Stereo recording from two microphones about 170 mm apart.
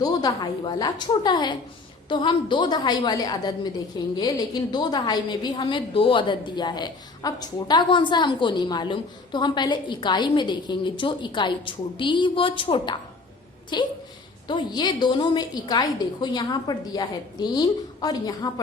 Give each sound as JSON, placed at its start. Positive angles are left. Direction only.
{"t": 0.0, "sound": "a woman's voice", "side_deg": 25}